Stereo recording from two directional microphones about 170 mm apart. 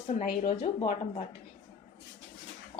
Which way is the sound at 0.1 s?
45° left (ahead or behind).